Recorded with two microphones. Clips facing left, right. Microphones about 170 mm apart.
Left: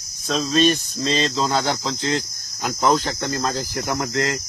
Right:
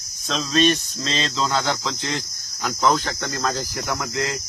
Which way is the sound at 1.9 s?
40° left (ahead or behind).